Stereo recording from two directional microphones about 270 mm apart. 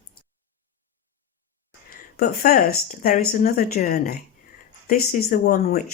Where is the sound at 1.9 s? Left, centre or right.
Left.